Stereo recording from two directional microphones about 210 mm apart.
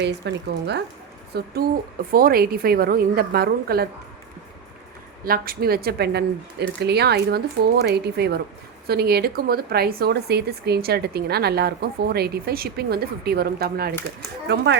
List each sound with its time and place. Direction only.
0.0 s speech: 55° right (ahead or behind)
5.2 s speech: 45° right (ahead or behind)